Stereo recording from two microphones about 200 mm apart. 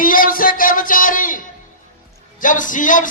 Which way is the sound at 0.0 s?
45° left (ahead or behind).